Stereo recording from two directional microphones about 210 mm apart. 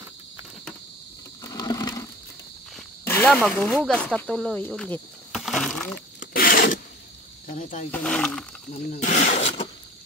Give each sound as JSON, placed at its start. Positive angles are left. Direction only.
{"t": 1.4, "sound": "a sound", "side_deg": 15}
{"t": 3.1, "sound": "speech", "side_deg": 10}
{"t": 6.1, "sound": "wood", "side_deg": 45}
{"t": 7.4, "sound": "speech", "side_deg": 40}
{"t": 7.9, "sound": "speech", "side_deg": 5}
{"t": 8.9, "sound": "snake", "side_deg": 35}